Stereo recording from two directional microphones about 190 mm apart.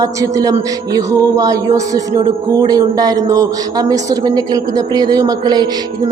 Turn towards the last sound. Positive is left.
turn(degrees=-20)  # may be behind; listen again after turning